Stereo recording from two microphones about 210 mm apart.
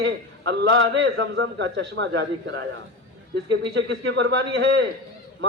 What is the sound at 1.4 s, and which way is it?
A man's voice, 60° right (ahead or behind).